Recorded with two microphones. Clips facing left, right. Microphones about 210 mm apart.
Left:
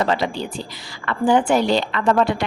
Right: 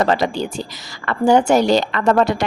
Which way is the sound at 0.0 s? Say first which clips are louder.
Right 3 dB; 45° right (ahead or behind).